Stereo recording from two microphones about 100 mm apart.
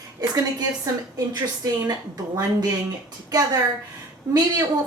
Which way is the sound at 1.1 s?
40° right (ahead or behind).